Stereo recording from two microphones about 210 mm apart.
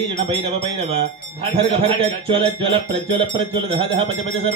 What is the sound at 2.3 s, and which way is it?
Music, 25° right (ahead or behind).